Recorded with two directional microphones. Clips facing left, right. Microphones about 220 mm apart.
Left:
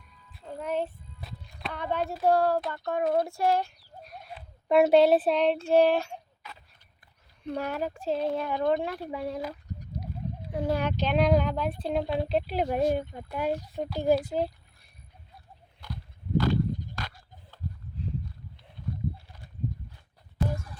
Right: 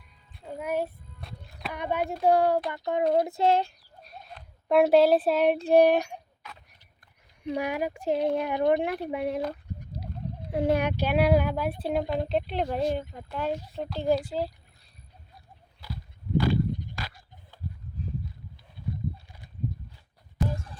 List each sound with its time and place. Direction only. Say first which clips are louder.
0.4 s speech: right 1 dB; 10° right (ahead or behind)
1.2 s music: even; centre (ahead or behind)
1.7 s speech: right 1 dB; 15° right (ahead or behind)
4.4 s speech: even; centre (ahead or behind); by 6.1 s 15° right (ahead or behind)
7.4 s speech: right 2 dB; 15° right (ahead or behind)
10.5 s speech: right 4 dB; 25° right (ahead or behind); by 14.2 s 10° left (ahead or behind)
14.2 s a child's voice: left 2 dB; 20° left (ahead or behind)
16.4 s a sound: right 1 dB; 10° right (ahead or behind)